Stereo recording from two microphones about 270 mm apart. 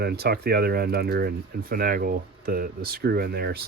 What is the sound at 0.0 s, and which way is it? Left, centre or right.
Speech, right.